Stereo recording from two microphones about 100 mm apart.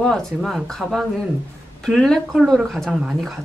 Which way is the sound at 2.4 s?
5° right (ahead or behind).